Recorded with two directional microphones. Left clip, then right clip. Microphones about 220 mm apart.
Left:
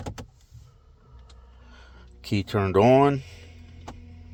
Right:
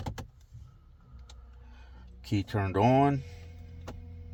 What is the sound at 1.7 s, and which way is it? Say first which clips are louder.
Speech: left 8 dB; 45° left (ahead or behind).